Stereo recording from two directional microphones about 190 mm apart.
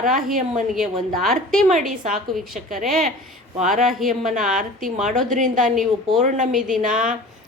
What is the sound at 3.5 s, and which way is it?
Speech, 45° right (ahead or behind).